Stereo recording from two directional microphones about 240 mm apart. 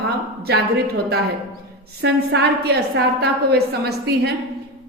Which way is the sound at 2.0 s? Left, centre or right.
Right.